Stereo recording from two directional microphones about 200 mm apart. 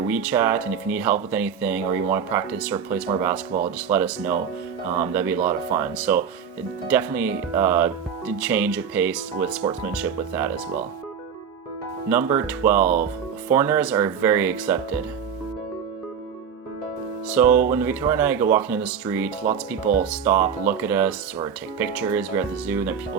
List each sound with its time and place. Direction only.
0.1 s speech: 10° right (ahead or behind)
5.1 s speech: 10° right (ahead or behind)
12.0 s speech: 10° right (ahead or behind)
17.2 s speech: 10° right (ahead or behind)